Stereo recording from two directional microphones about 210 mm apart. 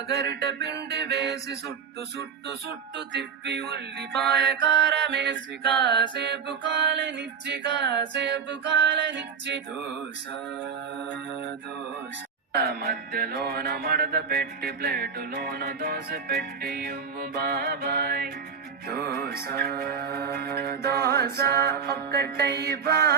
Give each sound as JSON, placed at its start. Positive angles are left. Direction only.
{"t": 0.1, "sound": "music", "side_deg": -55}
{"t": 3.1, "sound": "music", "side_deg": -55}
{"t": 12.5, "sound": "music", "side_deg": -50}